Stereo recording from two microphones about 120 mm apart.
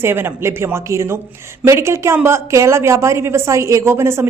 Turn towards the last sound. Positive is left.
turn(degrees=-20)  # may be behind; listen again after turning